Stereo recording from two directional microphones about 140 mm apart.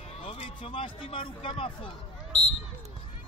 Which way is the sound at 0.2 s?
45° left (ahead or behind).